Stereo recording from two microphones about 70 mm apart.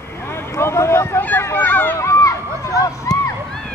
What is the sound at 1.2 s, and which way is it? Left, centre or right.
Speech, left.